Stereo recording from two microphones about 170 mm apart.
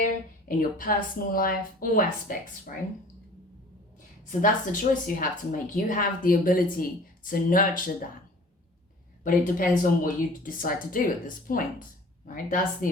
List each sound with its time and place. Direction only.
0.0 s a woman's voice: 55° left (ahead or behind)
4.3 s a woman's voice: 50° left (ahead or behind)
9.2 s a woman's voice: 55° left (ahead or behind)